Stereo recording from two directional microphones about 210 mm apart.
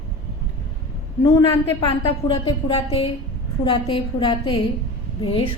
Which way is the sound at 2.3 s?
25° left (ahead or behind).